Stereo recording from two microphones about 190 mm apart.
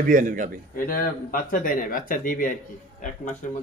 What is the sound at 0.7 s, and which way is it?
Speech, 50° left (ahead or behind).